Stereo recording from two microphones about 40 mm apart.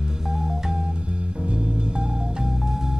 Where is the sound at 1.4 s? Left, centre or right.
Right.